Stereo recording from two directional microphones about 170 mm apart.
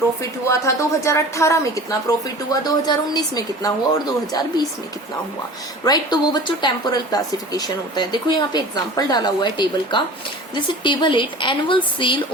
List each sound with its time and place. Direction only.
0.2 s a woman's voice: 15° left (ahead or behind)
5.8 s a woman's voice: 25° left (ahead or behind)